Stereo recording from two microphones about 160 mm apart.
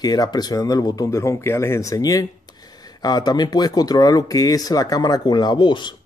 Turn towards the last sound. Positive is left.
turn(degrees=25)  # may be behind; listen again after turning